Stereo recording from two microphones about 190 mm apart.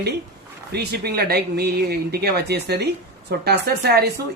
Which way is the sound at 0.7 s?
60° right (ahead or behind).